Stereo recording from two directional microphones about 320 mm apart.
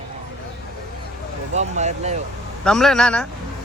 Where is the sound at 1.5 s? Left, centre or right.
Right.